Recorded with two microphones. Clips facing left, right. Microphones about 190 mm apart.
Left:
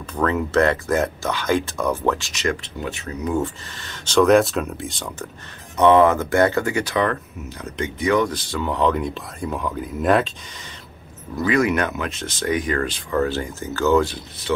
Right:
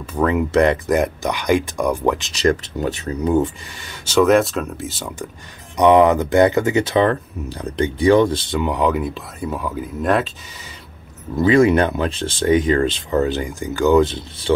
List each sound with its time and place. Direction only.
0.0 s speech: 10° right (ahead or behind)
2.3 s speech: 40° right (ahead or behind)
3.3 s speech: 15° right (ahead or behind)
8.5 s speech: 10° right (ahead or behind)
11.3 s speech: 25° right (ahead or behind)